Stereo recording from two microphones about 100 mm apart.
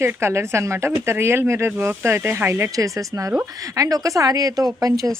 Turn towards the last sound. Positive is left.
turn(degrees=-35)  # may be behind; listen again after turning